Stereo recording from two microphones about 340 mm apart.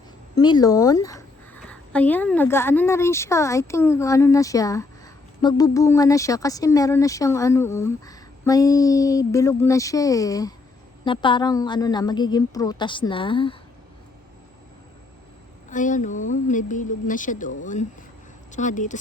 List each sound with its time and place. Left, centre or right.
0.3 s speech: centre
15.7 s a woman's voice: left